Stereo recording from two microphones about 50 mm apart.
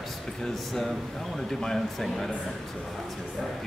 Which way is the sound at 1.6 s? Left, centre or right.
Centre.